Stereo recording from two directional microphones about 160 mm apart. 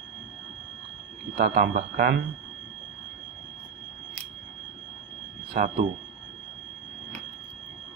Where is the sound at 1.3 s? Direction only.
70° right (ahead or behind).